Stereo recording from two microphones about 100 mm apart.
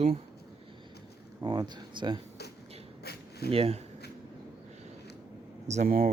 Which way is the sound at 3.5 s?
85° right.